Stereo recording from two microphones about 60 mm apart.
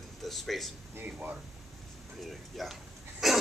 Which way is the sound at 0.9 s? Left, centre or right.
Right.